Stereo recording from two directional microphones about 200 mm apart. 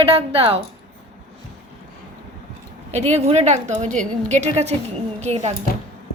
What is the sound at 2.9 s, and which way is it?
A woman's voice, 35° right (ahead or behind).